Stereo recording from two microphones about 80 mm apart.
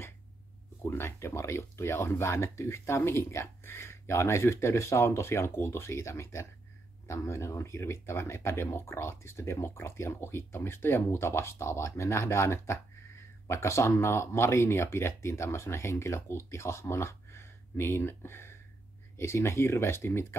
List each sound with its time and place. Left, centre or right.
0.8 s speech: left